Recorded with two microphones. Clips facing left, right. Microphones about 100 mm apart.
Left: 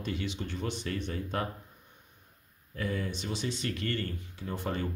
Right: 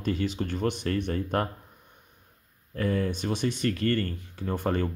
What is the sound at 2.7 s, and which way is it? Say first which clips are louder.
Speech: right 7 dB; 50° right (ahead or behind).